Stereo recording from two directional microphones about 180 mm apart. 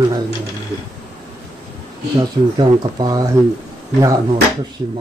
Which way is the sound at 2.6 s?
25° right (ahead or behind).